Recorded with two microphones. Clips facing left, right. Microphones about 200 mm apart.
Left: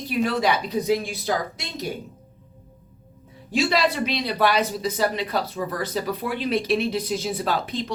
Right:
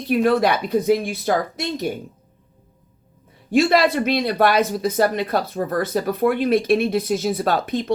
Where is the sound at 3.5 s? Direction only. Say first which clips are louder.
Right 6 dB; 55° right (ahead or behind).